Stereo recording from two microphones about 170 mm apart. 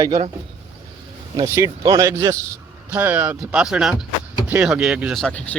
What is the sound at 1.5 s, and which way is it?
Speech, 20° right (ahead or behind).